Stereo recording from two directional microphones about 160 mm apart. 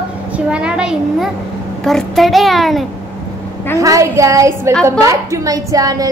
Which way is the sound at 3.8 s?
20° right (ahead or behind).